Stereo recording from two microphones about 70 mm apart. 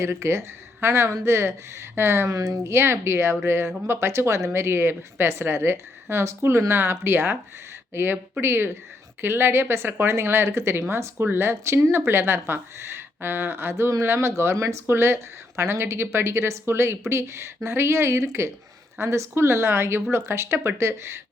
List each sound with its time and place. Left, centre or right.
0.0 s speech: right